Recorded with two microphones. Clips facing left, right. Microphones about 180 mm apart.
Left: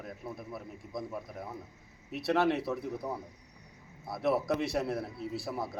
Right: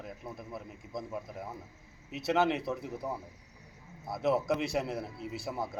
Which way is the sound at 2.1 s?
Centre (ahead or behind).